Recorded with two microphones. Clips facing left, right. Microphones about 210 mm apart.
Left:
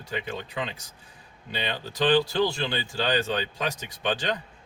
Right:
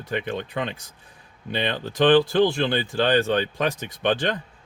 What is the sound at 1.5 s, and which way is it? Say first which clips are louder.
Speech: right 6 dB; 50° right (ahead or behind).